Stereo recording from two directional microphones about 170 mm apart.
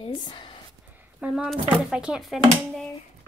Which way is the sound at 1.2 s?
5° right (ahead or behind).